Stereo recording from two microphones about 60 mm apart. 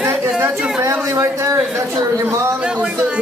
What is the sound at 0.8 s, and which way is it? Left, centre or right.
Speech, right.